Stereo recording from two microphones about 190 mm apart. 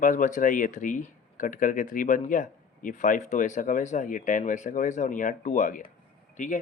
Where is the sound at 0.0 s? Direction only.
45° left (ahead or behind).